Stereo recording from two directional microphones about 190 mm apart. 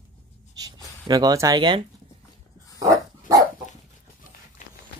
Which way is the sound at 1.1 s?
20° right (ahead or behind).